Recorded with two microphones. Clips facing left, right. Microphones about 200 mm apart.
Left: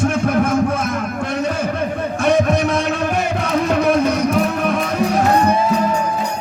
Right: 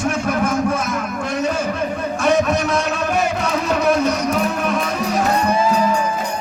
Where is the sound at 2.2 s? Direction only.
55° left (ahead or behind).